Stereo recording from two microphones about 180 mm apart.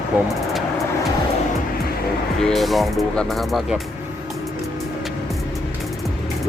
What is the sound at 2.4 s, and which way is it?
Speech, centre (ahead or behind).